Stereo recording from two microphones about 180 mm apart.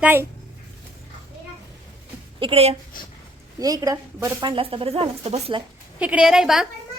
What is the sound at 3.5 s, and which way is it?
Speech, 20° right (ahead or behind).